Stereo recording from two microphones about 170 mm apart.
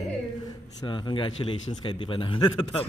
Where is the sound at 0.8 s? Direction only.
30° left (ahead or behind).